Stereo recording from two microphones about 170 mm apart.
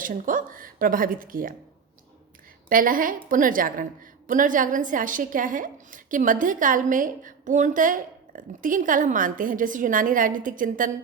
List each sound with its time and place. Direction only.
0.0 s a woman's voice: 55° right (ahead or behind)
2.6 s a woman's voice: 55° right (ahead or behind)